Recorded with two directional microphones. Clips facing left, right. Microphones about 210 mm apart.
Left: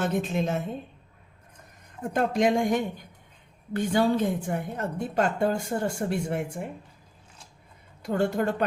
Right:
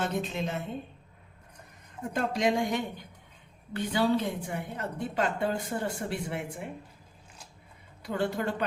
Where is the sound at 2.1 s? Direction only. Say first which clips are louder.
Left 4 dB; 50° left (ahead or behind).